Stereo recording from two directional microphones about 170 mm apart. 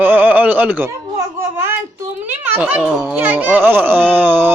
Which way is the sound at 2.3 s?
10° right (ahead or behind).